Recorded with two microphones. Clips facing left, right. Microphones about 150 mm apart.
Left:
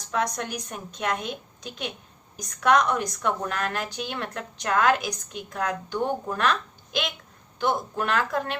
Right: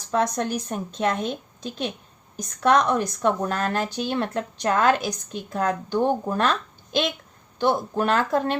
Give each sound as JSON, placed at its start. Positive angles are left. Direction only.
{"t": 0.5, "sound": "a woman's voice", "side_deg": -30}